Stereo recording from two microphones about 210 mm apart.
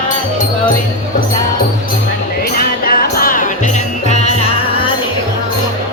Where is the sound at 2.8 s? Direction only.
45° left (ahead or behind).